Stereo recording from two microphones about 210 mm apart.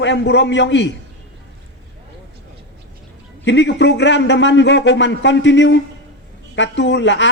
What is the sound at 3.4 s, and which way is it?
A man's voice, 55° left (ahead or behind).